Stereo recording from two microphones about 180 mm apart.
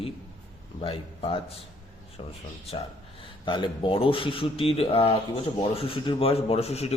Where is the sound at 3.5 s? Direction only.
30° left (ahead or behind).